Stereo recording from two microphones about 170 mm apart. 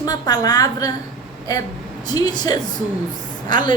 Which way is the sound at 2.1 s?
20° left (ahead or behind).